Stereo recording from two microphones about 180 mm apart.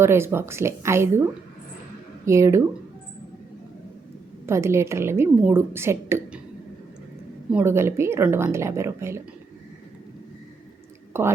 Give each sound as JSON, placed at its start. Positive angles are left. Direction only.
{"t": 0.0, "sound": "a woman's voice", "side_deg": -15}
{"t": 2.2, "sound": "a woman's voice", "side_deg": -15}
{"t": 4.4, "sound": "a woman's voice", "side_deg": -15}
{"t": 7.5, "sound": "a woman's voice", "side_deg": -15}
{"t": 11.1, "sound": "a woman's voice", "side_deg": -15}